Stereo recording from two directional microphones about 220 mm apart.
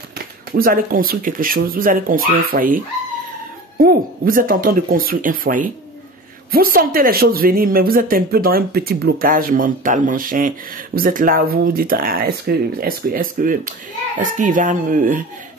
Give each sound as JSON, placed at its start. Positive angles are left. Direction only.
{"t": 0.5, "sound": "a woman's voice", "side_deg": -40}